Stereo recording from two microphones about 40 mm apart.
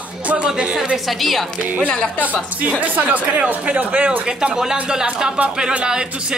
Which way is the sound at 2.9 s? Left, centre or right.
Right.